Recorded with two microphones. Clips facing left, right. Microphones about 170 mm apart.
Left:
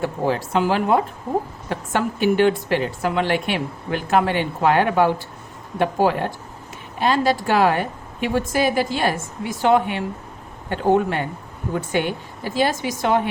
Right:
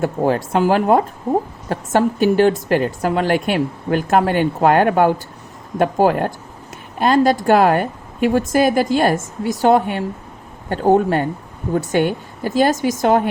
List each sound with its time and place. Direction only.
0.0 s a woman's voice: 50° right (ahead or behind)